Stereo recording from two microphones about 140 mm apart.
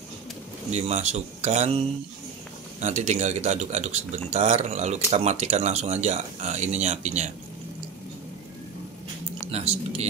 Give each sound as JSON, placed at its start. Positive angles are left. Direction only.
{"t": 0.7, "sound": "speech", "side_deg": -55}
{"t": 2.8, "sound": "speech", "side_deg": -55}
{"t": 9.5, "sound": "speech", "side_deg": -50}